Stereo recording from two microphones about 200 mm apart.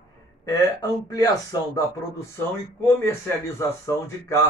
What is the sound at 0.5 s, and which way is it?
Speech, 15° left (ahead or behind).